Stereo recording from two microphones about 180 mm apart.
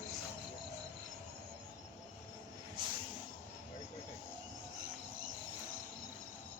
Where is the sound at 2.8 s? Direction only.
25° right (ahead or behind).